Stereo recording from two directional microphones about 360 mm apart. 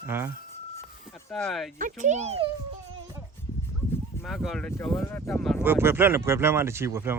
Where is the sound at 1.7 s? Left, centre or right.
Right.